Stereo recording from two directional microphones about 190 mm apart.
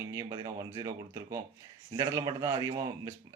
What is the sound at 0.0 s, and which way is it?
Speech, 15° right (ahead or behind).